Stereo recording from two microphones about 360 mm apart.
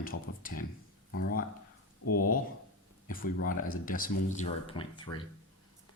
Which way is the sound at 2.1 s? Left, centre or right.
Left.